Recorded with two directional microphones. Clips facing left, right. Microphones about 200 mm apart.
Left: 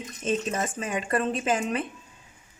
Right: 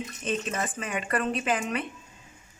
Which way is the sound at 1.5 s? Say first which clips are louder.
Left 2 dB; 25° left (ahead or behind).